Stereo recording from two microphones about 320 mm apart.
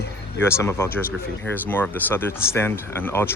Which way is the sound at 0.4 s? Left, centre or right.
Centre.